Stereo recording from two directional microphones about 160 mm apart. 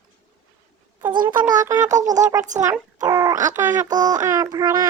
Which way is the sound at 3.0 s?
25° right (ahead or behind).